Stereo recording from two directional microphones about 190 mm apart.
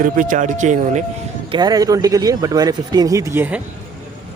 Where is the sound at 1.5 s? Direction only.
20° right (ahead or behind).